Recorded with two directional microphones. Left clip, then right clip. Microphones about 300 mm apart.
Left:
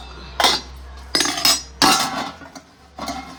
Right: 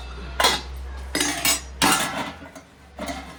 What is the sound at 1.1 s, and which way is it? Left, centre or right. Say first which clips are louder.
Cutlery: left 5 dB; centre.